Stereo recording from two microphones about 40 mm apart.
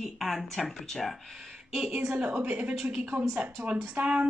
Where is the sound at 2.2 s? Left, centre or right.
Right.